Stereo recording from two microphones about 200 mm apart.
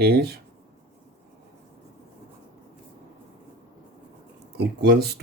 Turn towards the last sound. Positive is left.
turn(degrees=-55)  # may be behind; listen again after turning